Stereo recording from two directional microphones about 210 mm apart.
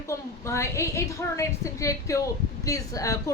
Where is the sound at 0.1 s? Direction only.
15° left (ahead or behind).